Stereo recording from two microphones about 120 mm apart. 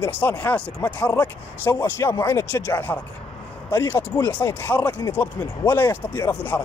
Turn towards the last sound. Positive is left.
turn(degrees=15)  # may be behind; listen again after turning